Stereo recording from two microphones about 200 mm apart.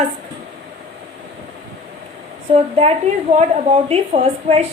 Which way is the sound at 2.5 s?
30° right (ahead or behind).